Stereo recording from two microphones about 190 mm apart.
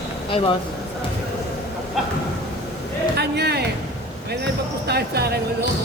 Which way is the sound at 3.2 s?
60° right (ahead or behind).